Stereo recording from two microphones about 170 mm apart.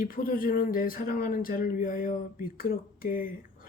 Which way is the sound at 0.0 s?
55° left (ahead or behind).